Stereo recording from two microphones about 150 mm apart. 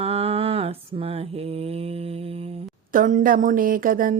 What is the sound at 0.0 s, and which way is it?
Mantra, 40° right (ahead or behind).